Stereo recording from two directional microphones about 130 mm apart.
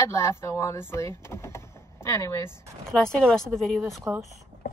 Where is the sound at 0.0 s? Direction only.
20° left (ahead or behind).